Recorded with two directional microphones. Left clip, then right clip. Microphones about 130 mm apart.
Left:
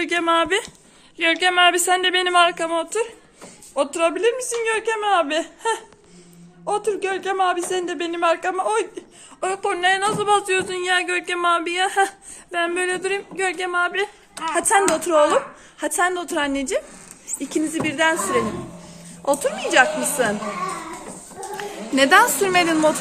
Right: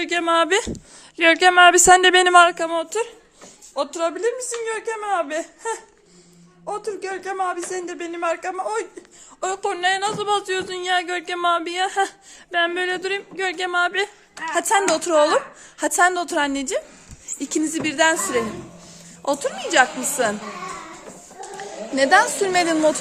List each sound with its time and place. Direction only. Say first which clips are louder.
0.0 s speech: left 1 dB; 30° right (ahead or behind)
0.3 s speech: right 2 dB; 55° right (ahead or behind)
1.2 s speech: right 4 dB; 90° right
2.6 s speech: left 1 dB; 40° right (ahead or behind)
3.4 s speech: left 3 dB; 15° right (ahead or behind)
9.4 s speech: left 1 dB; 30° right (ahead or behind)
14.4 s speech: left 1 dB; 25° right (ahead or behind)
14.9 s a woman's voice: even; 45° right (ahead or behind)
17.2 s speech: even; 45° right (ahead or behind)
19.2 s speech: left 2 dB; 35° right (ahead or behind)
21.6 s a sound: left 2 dB; 30° right (ahead or behind)
22.3 s speech: left 1 dB; 25° right (ahead or behind)
22.5 s speech: even; 40° right (ahead or behind)